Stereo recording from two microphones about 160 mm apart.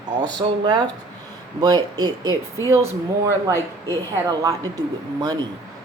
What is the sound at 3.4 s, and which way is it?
Speech, 20° right (ahead or behind).